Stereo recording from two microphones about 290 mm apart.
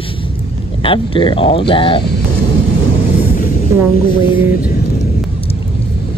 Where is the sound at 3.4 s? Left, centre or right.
Left.